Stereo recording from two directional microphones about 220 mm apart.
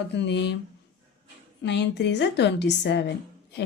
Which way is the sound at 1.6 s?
50° left (ahead or behind).